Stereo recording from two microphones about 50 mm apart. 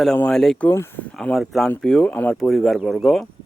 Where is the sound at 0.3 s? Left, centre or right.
Centre.